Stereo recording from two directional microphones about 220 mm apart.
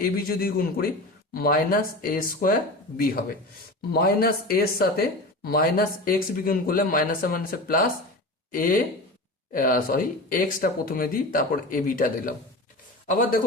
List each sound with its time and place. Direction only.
0.0 s speech: 40° left (ahead or behind)
3.9 s speech: 45° left (ahead or behind)